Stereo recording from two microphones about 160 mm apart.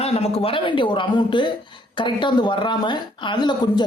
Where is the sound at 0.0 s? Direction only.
40° left (ahead or behind).